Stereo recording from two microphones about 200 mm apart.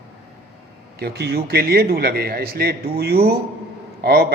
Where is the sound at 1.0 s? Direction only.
55° right (ahead or behind).